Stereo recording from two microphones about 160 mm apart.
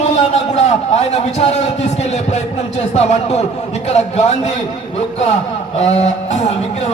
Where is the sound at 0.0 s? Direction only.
45° left (ahead or behind).